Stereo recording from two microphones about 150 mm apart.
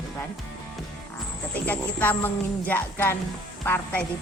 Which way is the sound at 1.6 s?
10° left (ahead or behind).